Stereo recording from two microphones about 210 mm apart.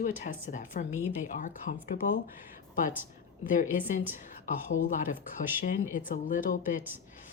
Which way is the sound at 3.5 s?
40° left (ahead or behind).